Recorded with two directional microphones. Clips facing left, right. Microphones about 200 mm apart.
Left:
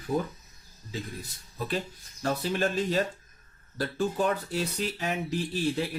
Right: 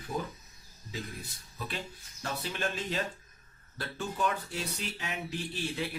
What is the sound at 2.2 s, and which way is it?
Speech, 40° left (ahead or behind).